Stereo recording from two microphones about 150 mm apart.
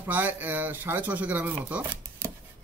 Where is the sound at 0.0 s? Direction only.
10° right (ahead or behind).